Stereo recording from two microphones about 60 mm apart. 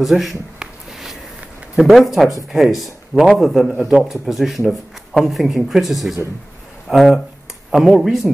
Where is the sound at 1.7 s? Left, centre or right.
Centre.